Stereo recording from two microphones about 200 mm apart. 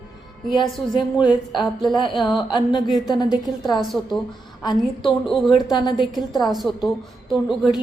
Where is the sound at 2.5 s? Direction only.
25° left (ahead or behind).